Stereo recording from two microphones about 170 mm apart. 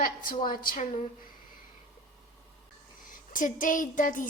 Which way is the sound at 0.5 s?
55° left (ahead or behind).